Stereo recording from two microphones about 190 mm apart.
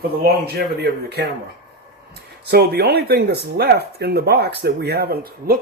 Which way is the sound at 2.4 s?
60° right (ahead or behind).